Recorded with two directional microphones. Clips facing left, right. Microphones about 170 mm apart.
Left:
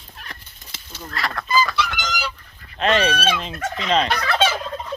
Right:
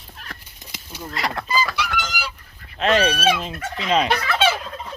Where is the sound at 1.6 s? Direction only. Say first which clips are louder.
Left 1 dB; 10° right (ahead or behind).